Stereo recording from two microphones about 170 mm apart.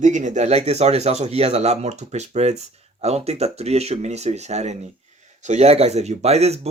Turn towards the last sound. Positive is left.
turn(degrees=-40)  # may be behind; listen again after turning